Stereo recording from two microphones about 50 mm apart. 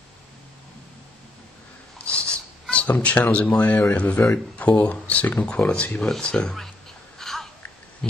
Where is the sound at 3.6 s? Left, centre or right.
Left.